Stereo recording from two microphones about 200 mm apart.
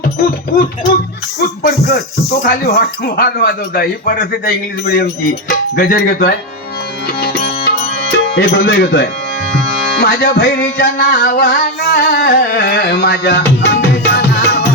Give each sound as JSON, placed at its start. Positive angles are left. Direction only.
{"t": 2.4, "sound": "speech", "side_deg": 50}
{"t": 7.2, "sound": "music", "side_deg": 55}
{"t": 8.1, "sound": "speech", "side_deg": 60}
{"t": 10.0, "sound": "music", "side_deg": 55}